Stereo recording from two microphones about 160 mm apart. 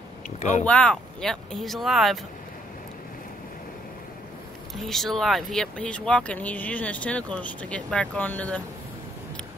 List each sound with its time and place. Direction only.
0.4 s speech: 45° left (ahead or behind)
0.7 s speech: 5° left (ahead or behind)
4.7 s speech: centre (ahead or behind)